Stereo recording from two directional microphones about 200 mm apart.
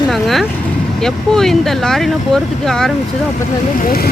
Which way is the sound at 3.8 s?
50° left (ahead or behind).